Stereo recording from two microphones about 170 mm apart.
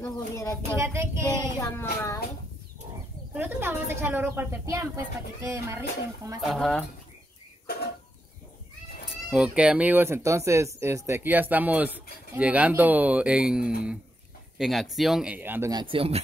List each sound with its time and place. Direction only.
0.0 s a sound: 15° left (ahead or behind)
0.7 s speech: 15° right (ahead or behind)
1.6 s speech: 15° left (ahead or behind)
3.3 s speech: 10° right (ahead or behind)
6.4 s speech: centre (ahead or behind)
9.1 s speech: 5° right (ahead or behind)
15.7 s speech: 30° right (ahead or behind)